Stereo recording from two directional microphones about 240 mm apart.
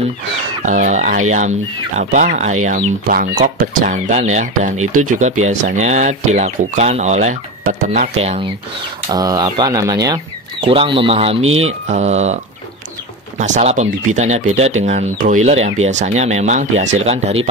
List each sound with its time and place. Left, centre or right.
0.7 s speech: right
4.7 s speech: right
5.5 s speech: right
9.1 s speech: centre
11.4 s speech: right
11.9 s speech: right
13.6 s speech: right